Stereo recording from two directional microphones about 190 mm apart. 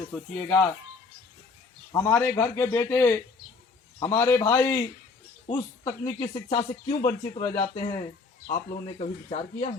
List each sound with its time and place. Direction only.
0.1 s a man's voice: 5° left (ahead or behind)
1.9 s a man's voice: 15° left (ahead or behind); by 9.7 s 35° left (ahead or behind)